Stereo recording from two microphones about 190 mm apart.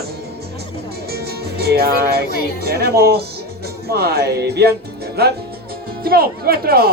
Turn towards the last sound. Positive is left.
turn(degrees=-55)  # may be behind; listen again after turning